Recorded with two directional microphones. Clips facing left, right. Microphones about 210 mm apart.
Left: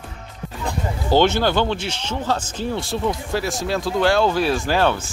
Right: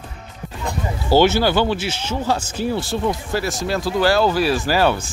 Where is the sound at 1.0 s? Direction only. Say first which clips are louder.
Right 2 dB; 5° right (ahead or behind).